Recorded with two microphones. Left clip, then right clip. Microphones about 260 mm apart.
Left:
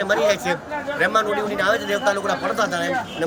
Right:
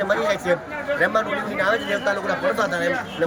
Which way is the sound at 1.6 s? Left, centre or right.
Centre.